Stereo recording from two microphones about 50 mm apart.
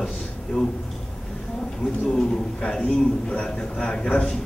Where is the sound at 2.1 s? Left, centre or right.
Centre.